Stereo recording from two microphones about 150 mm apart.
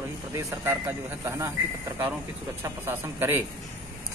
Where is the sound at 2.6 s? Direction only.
15° right (ahead or behind).